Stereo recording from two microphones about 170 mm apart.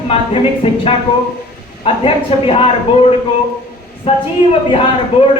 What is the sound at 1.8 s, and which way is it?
A man's voice, 35° left (ahead or behind).